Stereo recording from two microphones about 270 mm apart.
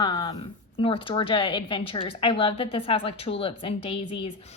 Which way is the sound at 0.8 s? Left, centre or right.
Centre.